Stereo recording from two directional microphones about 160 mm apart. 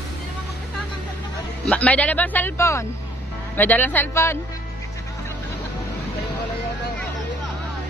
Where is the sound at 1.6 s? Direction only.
10° left (ahead or behind).